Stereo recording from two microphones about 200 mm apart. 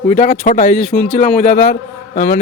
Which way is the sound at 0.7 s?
5° left (ahead or behind).